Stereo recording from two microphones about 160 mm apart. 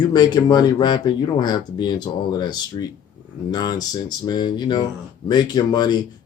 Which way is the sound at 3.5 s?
25° left (ahead or behind).